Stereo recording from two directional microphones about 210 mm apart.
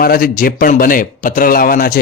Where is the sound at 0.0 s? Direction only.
45° left (ahead or behind).